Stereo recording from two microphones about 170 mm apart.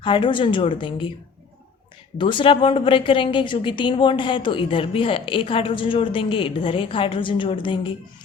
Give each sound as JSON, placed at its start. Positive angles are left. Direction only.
{"t": 0.0, "sound": "a woman's voice", "side_deg": 30}
{"t": 2.1, "sound": "a woman's voice", "side_deg": 30}